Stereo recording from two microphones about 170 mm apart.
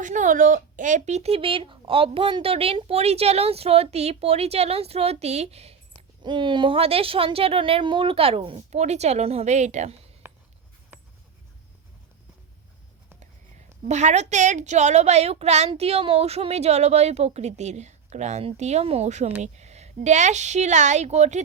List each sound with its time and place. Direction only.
0.0 s speech: 45° right (ahead or behind)
6.0 s speech: 25° right (ahead or behind); by 9.9 s 45° right (ahead or behind)
10.2 s writing: 15° right (ahead or behind)
13.8 s a woman's voice: 40° right (ahead or behind)